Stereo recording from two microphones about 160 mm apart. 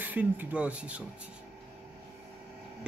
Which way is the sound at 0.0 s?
10° right (ahead or behind).